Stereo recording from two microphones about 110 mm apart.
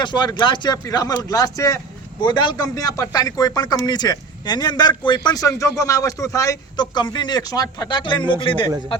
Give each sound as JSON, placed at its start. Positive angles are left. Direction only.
{"t": 0.0, "sound": "a man's voice", "side_deg": 40}
{"t": 2.2, "sound": "a man's voice", "side_deg": 45}